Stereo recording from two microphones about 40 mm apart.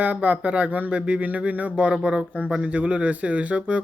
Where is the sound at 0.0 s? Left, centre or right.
Right.